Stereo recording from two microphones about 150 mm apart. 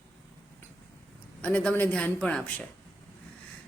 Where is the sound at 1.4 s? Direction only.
10° left (ahead or behind).